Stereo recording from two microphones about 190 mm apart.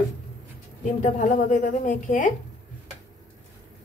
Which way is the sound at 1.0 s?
45° left (ahead or behind).